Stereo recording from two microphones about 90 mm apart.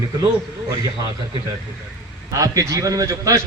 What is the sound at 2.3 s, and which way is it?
A man's voice, 40° right (ahead or behind).